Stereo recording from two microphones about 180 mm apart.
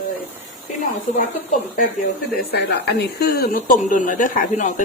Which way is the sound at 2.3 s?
65° left (ahead or behind).